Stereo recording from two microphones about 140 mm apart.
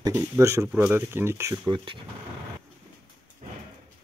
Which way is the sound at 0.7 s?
10° right (ahead or behind).